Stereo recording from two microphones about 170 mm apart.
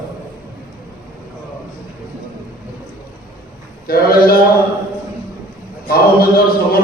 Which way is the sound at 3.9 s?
60° left (ahead or behind).